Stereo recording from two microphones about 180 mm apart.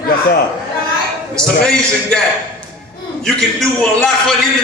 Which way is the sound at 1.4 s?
5° left (ahead or behind).